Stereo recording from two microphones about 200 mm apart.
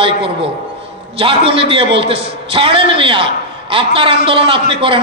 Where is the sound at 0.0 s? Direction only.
25° right (ahead or behind).